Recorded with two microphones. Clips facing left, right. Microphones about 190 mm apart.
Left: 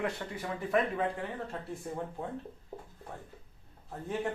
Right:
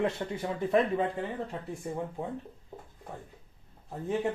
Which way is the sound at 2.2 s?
15° right (ahead or behind).